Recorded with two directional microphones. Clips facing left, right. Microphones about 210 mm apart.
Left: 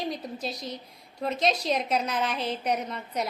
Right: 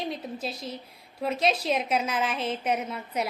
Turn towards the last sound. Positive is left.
turn(degrees=-5)  # may be behind; listen again after turning